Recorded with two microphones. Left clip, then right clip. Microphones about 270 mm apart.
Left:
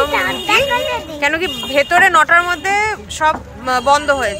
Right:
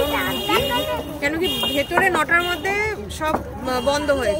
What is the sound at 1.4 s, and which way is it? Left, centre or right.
Speech, left.